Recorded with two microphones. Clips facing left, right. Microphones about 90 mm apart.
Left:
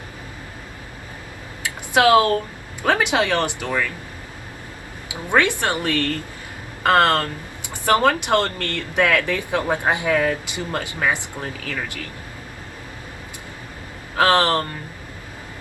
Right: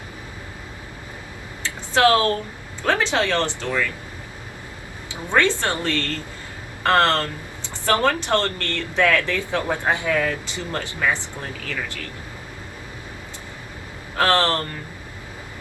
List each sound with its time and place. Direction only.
1.6 s a sound: 15° left (ahead or behind)
2.8 s speech: 15° left (ahead or behind)
5.0 s speech: 15° left (ahead or behind)
14.2 s speech: 15° left (ahead or behind)